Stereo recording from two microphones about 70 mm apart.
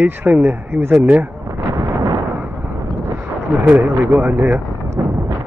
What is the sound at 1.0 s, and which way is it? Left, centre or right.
Speech, centre.